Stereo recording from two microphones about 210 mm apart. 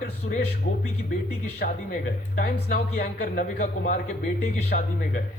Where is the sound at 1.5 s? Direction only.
40° left (ahead or behind).